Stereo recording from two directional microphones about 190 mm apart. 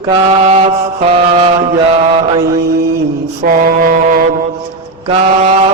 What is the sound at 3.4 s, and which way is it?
Mantra, 45° right (ahead or behind).